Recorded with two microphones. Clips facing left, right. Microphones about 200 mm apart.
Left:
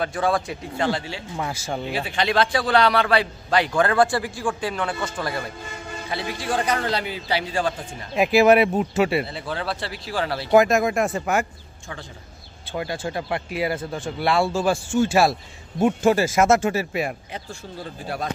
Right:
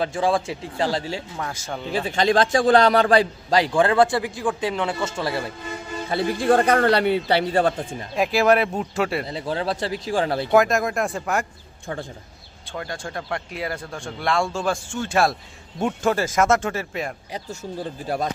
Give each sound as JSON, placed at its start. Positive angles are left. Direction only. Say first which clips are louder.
{"t": 0.0, "sound": "speech", "louder": "right 1 dB", "side_deg": -25}
{"t": 1.4, "sound": "speech", "louder": "left 2 dB", "side_deg": 10}
{"t": 2.0, "sound": "a man's voice", "louder": "right 4 dB", "side_deg": -45}
{"t": 6.0, "sound": "speech", "louder": "right 8 dB", "side_deg": -50}
{"t": 8.1, "sound": "speech", "louder": "left 3 dB", "side_deg": 5}
{"t": 9.3, "sound": "speech", "louder": "right 3 dB", "side_deg": -35}
{"t": 10.5, "sound": "speech", "louder": "left 3 dB", "side_deg": 0}
{"t": 12.7, "sound": "speech", "louder": "left 4 dB", "side_deg": 5}